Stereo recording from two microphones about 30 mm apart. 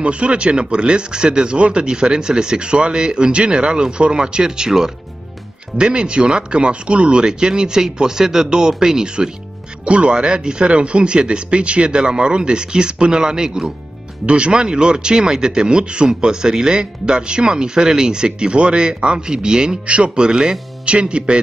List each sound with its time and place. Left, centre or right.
0.0 s speech: right
5.8 s speech: right
9.8 s speech: right
10.1 s speech: right
14.2 s speech: right
20.8 s speech: right